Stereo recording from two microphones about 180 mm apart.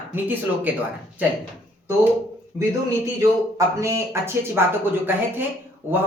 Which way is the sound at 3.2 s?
15° right (ahead or behind).